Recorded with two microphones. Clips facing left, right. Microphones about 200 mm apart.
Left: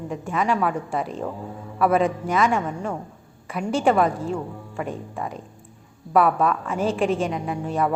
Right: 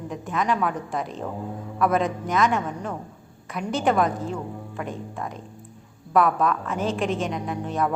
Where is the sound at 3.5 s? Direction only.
5° left (ahead or behind).